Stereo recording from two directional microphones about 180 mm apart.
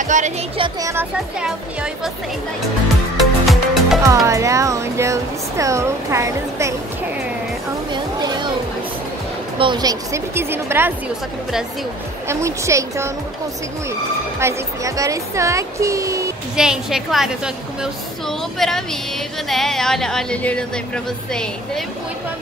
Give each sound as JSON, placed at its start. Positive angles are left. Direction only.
{"t": 0.0, "sound": "music", "side_deg": -45}
{"t": 0.6, "sound": "speech", "side_deg": -20}
{"t": 3.2, "sound": "music", "side_deg": 0}
{"t": 4.0, "sound": "speech", "side_deg": -15}
{"t": 7.9, "sound": "a sound", "side_deg": -25}
{"t": 9.6, "sound": "speech", "side_deg": -25}
{"t": 12.3, "sound": "speech", "side_deg": -15}
{"t": 14.4, "sound": "speech", "side_deg": -20}
{"t": 16.5, "sound": "speech", "side_deg": -5}
{"t": 18.6, "sound": "speech", "side_deg": 0}